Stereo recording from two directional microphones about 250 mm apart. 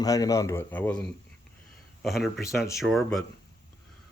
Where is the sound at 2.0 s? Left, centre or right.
Centre.